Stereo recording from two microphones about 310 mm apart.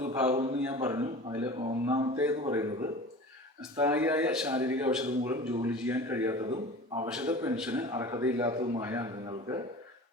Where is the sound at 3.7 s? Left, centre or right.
Centre.